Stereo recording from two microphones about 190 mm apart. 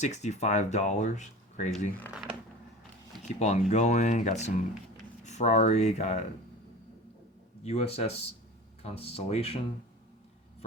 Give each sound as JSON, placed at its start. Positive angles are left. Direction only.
{"t": 0.0, "sound": "speech", "side_deg": 35}
{"t": 3.2, "sound": "speech", "side_deg": 35}
{"t": 7.6, "sound": "speech", "side_deg": 35}